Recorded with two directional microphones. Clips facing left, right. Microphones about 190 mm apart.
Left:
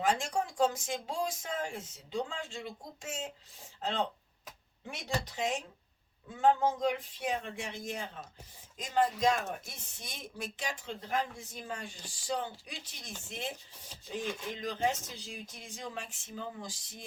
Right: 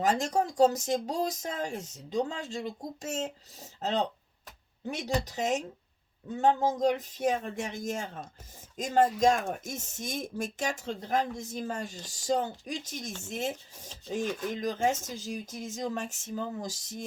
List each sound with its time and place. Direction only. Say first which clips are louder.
0.0 s speech: right 4 dB; 40° right (ahead or behind)